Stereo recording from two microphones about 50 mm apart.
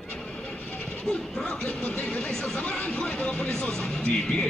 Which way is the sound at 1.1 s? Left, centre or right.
Centre.